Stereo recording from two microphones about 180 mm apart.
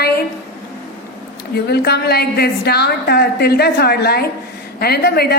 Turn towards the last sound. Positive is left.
turn(degrees=60)  # may be behind; listen again after turning